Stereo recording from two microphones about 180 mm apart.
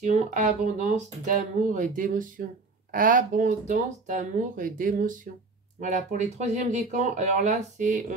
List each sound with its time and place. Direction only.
0.0 s speech: 40° right (ahead or behind)